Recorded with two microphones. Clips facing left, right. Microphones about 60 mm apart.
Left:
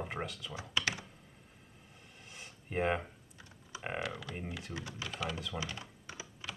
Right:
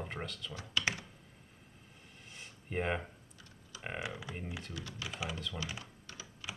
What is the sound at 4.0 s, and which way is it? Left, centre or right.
Speech, centre.